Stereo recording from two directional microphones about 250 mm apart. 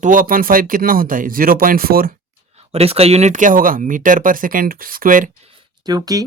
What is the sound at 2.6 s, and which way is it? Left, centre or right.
Speech, right.